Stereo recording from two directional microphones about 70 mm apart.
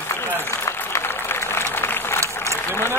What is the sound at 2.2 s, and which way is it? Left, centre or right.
Applause, right.